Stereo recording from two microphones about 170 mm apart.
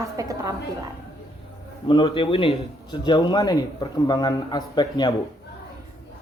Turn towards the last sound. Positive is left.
turn(degrees=25)  # may be behind; listen again after turning